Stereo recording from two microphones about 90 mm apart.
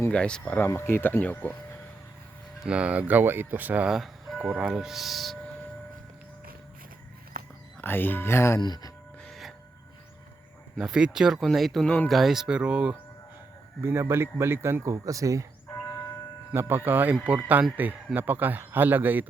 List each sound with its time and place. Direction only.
0.1 s speech: 10° left (ahead or behind)
2.6 s a man's voice: 15° right (ahead or behind)
3.8 s ice cream truck: centre (ahead or behind)
4.4 s speech: 15° right (ahead or behind)
7.8 s speech: 25° left (ahead or behind)
8.6 s speech: 50° left (ahead or behind)
9.2 s train: centre (ahead or behind)
10.8 s speech: 10° right (ahead or behind)
13.8 s a man's voice: 30° right (ahead or behind)
15.7 s church bell: 35° left (ahead or behind)
16.5 s a man's voice: 25° right (ahead or behind)